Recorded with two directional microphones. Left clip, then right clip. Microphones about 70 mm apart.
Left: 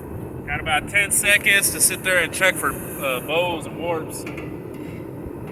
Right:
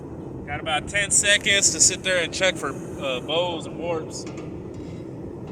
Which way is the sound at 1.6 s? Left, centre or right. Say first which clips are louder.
Right 2 dB; right.